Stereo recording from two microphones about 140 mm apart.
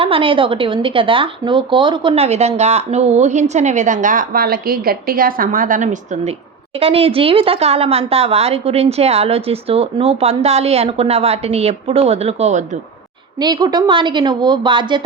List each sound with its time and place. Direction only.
0.0 s speech: 40° right (ahead or behind)
2.1 s a woman's voice: 50° right (ahead or behind)
6.7 s a woman's voice: 45° right (ahead or behind)
13.4 s speech: 30° right (ahead or behind)